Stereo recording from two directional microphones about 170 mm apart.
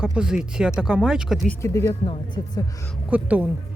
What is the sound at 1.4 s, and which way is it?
Speech, 15° left (ahead or behind).